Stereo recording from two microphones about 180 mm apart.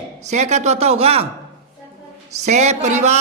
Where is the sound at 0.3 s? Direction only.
40° right (ahead or behind).